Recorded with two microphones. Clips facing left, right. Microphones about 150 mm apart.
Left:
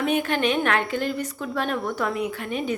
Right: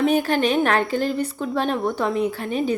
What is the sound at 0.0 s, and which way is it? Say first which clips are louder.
A woman's voice: right 4 dB; 35° right (ahead or behind).